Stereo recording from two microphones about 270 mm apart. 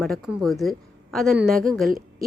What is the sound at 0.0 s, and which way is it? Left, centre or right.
Speech, centre.